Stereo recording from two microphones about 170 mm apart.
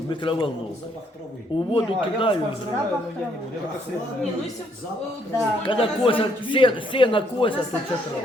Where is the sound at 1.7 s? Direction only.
30° left (ahead or behind).